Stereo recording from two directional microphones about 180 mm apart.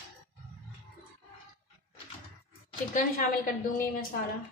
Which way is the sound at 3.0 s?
50° left (ahead or behind).